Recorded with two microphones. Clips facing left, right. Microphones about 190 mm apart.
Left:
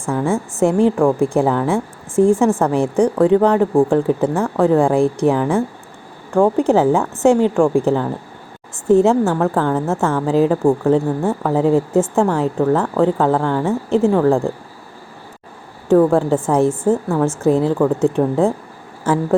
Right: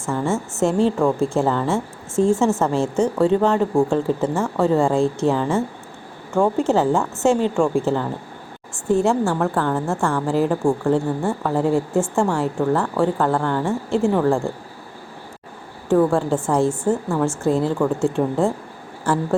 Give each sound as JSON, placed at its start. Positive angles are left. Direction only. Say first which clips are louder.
{"t": 0.0, "sound": "a woman's voice", "louder": "left 3 dB", "side_deg": 15}
{"t": 15.9, "sound": "a woman's voice", "louder": "left 4 dB", "side_deg": 15}